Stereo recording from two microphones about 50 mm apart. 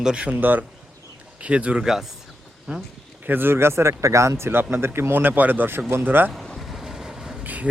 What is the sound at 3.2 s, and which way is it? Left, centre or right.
Speech, right.